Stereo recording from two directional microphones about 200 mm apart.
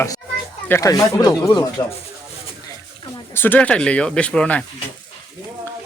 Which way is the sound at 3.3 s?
10° left (ahead or behind).